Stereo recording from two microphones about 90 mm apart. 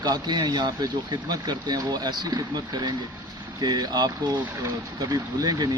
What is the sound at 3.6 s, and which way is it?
A man's voice, 50° right (ahead or behind).